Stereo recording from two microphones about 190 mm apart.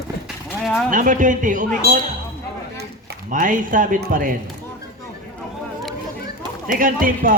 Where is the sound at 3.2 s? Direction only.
45° right (ahead or behind).